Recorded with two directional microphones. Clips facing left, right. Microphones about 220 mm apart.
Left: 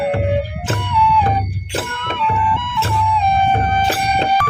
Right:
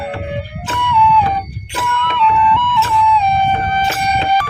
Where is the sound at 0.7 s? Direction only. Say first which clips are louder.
Right 3 dB; 40° left (ahead or behind).